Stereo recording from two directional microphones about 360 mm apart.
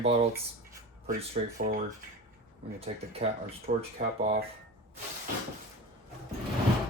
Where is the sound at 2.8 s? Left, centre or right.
Centre.